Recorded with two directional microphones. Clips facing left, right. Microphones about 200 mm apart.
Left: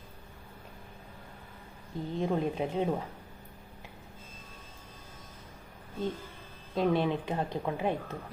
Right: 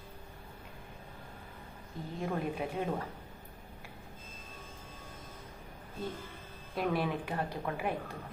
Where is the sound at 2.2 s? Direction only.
25° left (ahead or behind).